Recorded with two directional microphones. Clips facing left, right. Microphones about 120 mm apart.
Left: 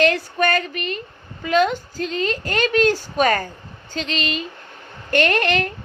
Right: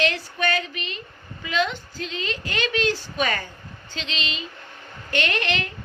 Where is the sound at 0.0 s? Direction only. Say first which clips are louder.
Left 6 dB; 45° left (ahead or behind).